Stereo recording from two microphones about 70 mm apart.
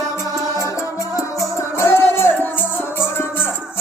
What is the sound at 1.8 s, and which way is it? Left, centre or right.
Music, left.